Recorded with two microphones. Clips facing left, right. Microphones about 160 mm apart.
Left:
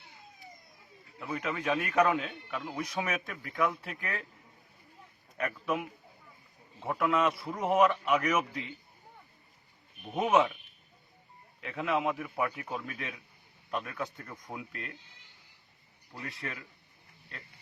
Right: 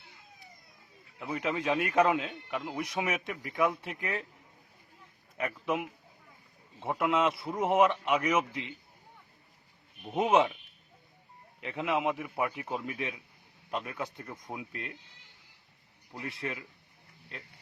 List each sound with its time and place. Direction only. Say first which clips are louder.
1.2 s speech: right 2 dB; 20° right (ahead or behind)
5.4 s speech: right 1 dB; 20° right (ahead or behind)
10.2 s speech: right 1 dB; 25° right (ahead or behind)
11.6 s speech: even; 20° right (ahead or behind)